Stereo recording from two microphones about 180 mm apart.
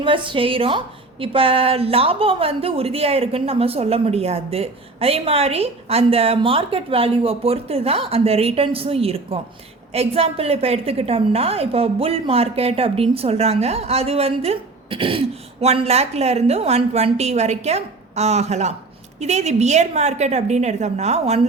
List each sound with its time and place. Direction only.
0.0 s a woman's voice: 30° right (ahead or behind)